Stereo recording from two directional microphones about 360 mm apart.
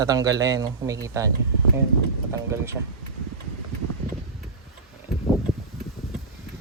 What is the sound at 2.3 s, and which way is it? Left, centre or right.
Speech, centre.